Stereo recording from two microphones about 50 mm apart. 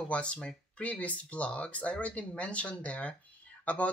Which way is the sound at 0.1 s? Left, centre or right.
Left.